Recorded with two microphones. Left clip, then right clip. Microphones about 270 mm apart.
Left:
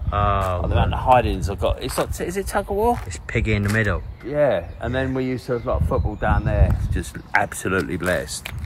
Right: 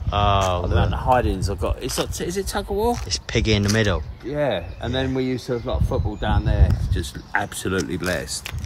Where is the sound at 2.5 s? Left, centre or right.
Centre.